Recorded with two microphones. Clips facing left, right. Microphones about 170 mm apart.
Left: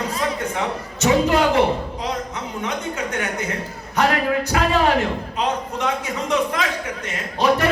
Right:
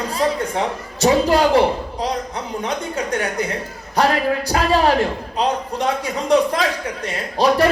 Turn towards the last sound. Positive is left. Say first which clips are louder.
# right 3 dB
turn(degrees=-35)  # may be behind; listen again after turning